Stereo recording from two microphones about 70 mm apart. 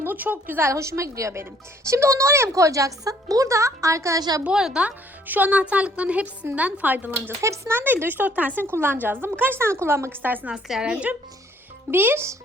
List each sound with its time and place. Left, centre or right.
0.0 s speech: right
0.7 s a woman's voice: right
4.2 s a woman's voice: right
4.4 s speech: centre
4.9 s speech: right
7.4 s a woman's voice: right
7.8 s speech: right
10.2 s speech: right
10.5 s speech: centre
11.9 s speech: right